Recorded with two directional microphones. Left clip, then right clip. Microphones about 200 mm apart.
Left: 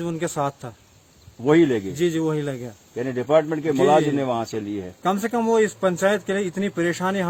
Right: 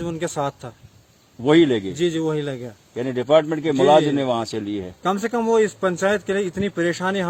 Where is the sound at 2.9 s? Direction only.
45° right (ahead or behind).